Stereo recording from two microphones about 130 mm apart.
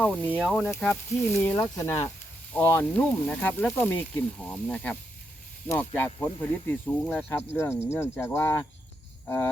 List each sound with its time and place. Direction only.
0.0 s speech: 10° left (ahead or behind)
1.4 s speech: 15° left (ahead or behind)